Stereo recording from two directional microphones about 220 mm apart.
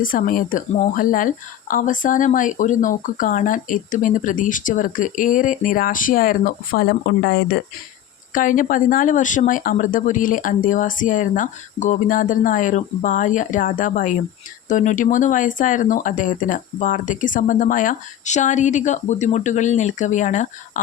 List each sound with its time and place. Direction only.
0.0 s speech: 40° left (ahead or behind)
8.3 s speech: 35° left (ahead or behind)